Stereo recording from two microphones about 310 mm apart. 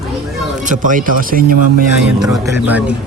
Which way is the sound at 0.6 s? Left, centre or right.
Right.